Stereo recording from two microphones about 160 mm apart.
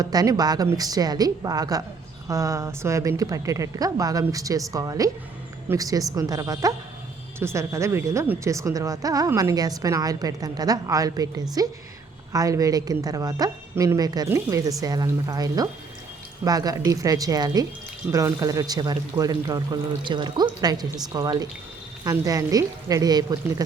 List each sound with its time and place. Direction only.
0.0 s speech: 25° right (ahead or behind)